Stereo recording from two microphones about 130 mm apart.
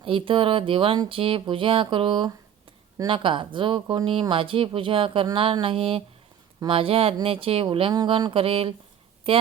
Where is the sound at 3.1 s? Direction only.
40° right (ahead or behind).